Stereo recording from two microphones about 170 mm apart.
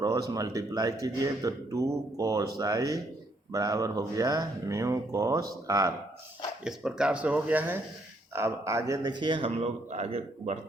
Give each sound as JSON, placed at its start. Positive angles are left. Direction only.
{"t": 0.0, "sound": "speech", "side_deg": -20}
{"t": 6.7, "sound": "speech", "side_deg": -5}